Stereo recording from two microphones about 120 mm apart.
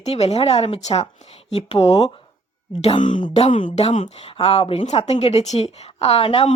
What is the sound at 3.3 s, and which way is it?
Speech, 70° left (ahead or behind).